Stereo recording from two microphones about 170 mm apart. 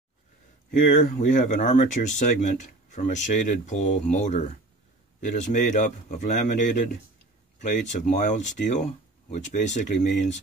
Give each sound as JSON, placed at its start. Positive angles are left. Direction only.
{"t": 0.7, "sound": "speech", "side_deg": 50}